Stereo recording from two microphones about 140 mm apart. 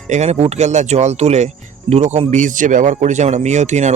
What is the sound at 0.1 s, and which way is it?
Speech, 50° right (ahead or behind).